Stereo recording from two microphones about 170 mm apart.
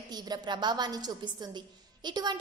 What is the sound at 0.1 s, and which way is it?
A woman's voice, 25° right (ahead or behind).